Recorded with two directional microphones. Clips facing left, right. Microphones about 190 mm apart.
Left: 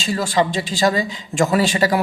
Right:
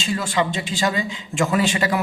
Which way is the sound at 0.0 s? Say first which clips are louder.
Left 3 dB; 35° left (ahead or behind).